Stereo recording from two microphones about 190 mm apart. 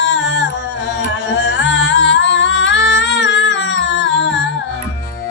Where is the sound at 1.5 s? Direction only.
75° left (ahead or behind).